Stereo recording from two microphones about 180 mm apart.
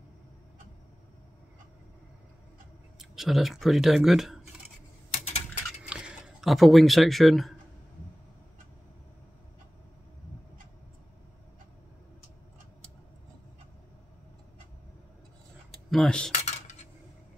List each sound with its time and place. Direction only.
3.0 s speech: centre (ahead or behind)
5.2 s typing: 40° left (ahead or behind)
5.9 s speech: 5° right (ahead or behind)
15.9 s speech: 5° left (ahead or behind)
16.3 s cutlery: 40° left (ahead or behind)